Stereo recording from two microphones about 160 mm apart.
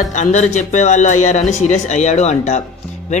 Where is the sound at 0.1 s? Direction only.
50° left (ahead or behind).